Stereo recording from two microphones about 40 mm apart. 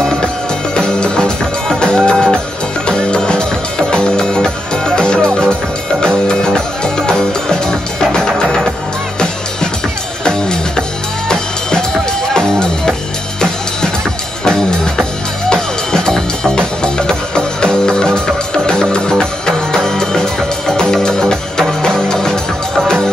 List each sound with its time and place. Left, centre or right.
0.7 s music: left
10.2 s music: centre
14.4 s music: centre